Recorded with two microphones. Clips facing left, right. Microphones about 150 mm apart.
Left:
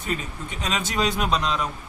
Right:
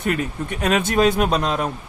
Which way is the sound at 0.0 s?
65° right (ahead or behind).